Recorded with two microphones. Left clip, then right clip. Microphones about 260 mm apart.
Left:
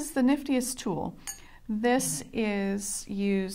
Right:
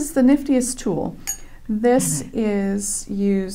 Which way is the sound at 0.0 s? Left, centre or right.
Left.